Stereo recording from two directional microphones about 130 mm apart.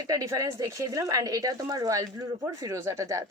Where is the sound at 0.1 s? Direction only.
25° right (ahead or behind).